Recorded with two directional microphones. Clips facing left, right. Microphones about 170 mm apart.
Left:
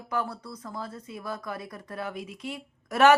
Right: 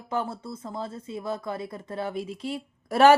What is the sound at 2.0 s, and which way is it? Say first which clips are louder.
A woman's voice: right 5 dB; 30° right (ahead or behind).